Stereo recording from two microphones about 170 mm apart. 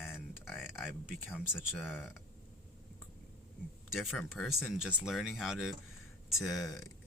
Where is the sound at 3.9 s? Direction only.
Centre (ahead or behind).